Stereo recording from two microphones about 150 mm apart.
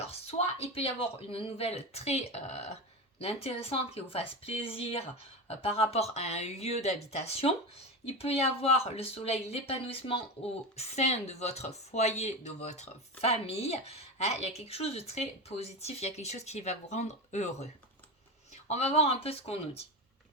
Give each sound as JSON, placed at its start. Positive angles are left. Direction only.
{"t": 0.0, "sound": "speech", "side_deg": 45}